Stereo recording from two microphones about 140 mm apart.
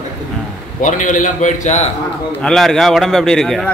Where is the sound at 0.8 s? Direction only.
65° left (ahead or behind).